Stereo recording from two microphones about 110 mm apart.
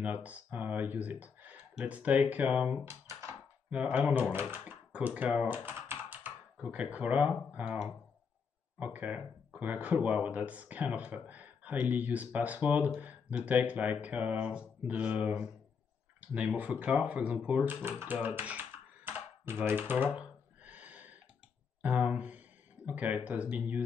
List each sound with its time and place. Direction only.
0.0 s speech: 15° right (ahead or behind)
2.9 s a sound: 25° right (ahead or behind)
3.7 s speech: 10° right (ahead or behind)
17.8 s computer keyboard: 20° right (ahead or behind)
21.8 s speech: 15° right (ahead or behind)